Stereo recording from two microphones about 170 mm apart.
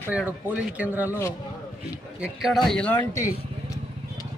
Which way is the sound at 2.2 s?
Centre (ahead or behind).